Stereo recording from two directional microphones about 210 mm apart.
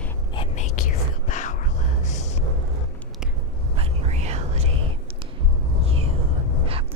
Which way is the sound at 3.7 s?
30° right (ahead or behind).